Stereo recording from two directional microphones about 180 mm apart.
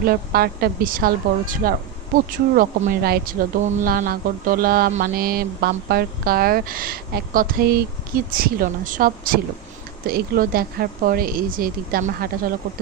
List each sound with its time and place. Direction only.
0.0 s speech: 55° right (ahead or behind)
2.1 s music: 50° right (ahead or behind)
3.6 s music: 45° right (ahead or behind)
10.1 s speech: 55° right (ahead or behind)